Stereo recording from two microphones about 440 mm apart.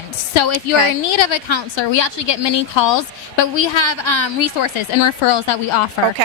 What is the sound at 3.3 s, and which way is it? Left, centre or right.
Speech, left.